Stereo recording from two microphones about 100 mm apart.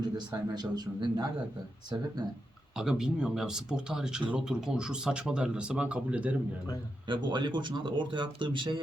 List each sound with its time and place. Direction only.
0.0 s speech: 45° right (ahead or behind)
2.7 s speech: 5° right (ahead or behind)
7.1 s speech: 50° right (ahead or behind)